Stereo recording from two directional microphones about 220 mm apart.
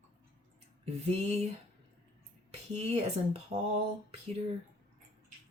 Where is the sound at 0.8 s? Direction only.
30° right (ahead or behind).